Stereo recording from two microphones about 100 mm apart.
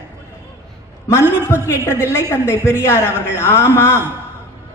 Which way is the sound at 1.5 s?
30° left (ahead or behind).